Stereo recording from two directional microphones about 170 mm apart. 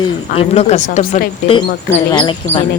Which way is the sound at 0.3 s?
40° left (ahead or behind).